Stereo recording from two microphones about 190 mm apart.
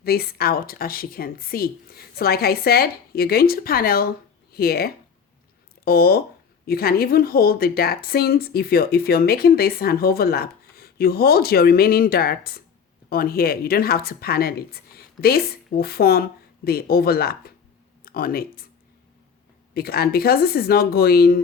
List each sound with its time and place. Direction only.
0.0 s speech: 55° left (ahead or behind)
19.7 s speech: 55° left (ahead or behind)